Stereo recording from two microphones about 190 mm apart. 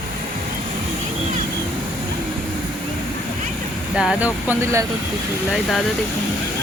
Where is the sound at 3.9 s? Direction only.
5° right (ahead or behind).